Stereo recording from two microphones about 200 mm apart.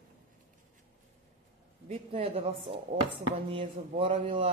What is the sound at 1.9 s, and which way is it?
Speech, 30° right (ahead or behind).